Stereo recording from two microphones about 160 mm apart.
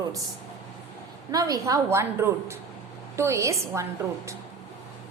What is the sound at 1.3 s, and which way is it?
A woman's voice, 20° right (ahead or behind).